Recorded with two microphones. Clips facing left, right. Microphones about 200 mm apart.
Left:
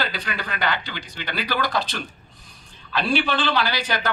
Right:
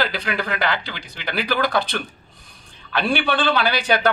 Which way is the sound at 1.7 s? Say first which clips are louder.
Right 4 dB; 55° right (ahead or behind).